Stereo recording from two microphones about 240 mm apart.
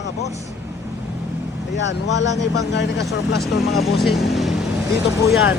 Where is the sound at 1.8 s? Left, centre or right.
Left.